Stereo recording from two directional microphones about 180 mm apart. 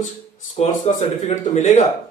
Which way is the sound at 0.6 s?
40° left (ahead or behind).